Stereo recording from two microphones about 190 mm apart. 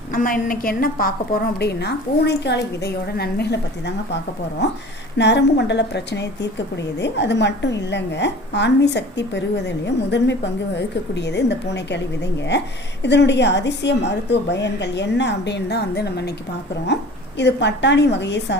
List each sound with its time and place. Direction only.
0.1 s a woman's voice: 45° left (ahead or behind)
5.1 s a woman's voice: 65° left (ahead or behind)